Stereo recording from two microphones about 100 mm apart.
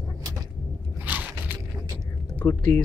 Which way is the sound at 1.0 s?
15° right (ahead or behind).